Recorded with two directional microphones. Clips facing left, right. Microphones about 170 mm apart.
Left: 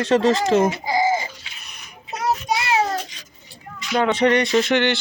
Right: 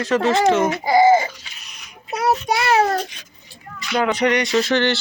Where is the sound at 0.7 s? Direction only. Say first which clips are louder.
Right 6 dB; 70° right (ahead or behind).